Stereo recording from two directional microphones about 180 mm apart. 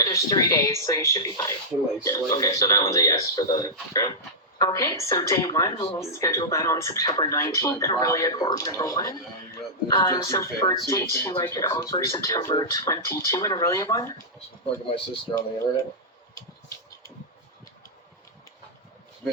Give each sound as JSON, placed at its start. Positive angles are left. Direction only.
{"t": 0.0, "sound": "speech", "side_deg": 20}
{"t": 5.7, "sound": "speech", "side_deg": 30}
{"t": 6.0, "sound": "speech", "side_deg": 15}
{"t": 14.8, "sound": "speech", "side_deg": 30}